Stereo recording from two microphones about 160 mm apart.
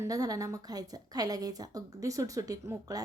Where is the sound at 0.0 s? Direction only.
20° right (ahead or behind).